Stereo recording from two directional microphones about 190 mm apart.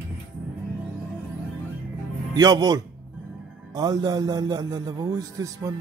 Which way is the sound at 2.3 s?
20° right (ahead or behind).